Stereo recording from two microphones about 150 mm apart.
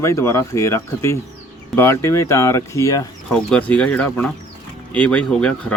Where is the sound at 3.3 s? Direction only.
5° left (ahead or behind).